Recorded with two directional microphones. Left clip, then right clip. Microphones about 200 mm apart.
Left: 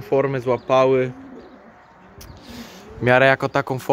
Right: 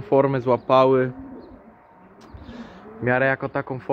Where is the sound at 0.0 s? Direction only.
15° right (ahead or behind).